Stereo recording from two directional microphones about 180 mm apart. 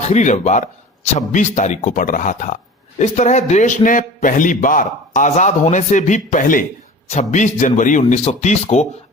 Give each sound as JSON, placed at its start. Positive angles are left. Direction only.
{"t": 0.0, "sound": "a man's voice", "side_deg": 40}